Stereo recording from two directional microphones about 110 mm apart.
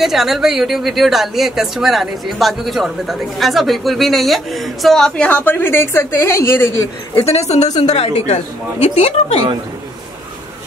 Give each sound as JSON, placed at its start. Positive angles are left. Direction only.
{"t": 0.0, "sound": "speech", "side_deg": 0}
{"t": 7.2, "sound": "a woman's voice", "side_deg": 85}